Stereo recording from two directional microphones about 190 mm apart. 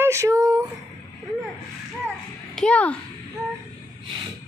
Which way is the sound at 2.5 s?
5° left (ahead or behind).